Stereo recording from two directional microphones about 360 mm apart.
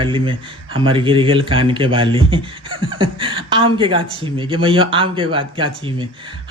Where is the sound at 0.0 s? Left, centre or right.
Centre.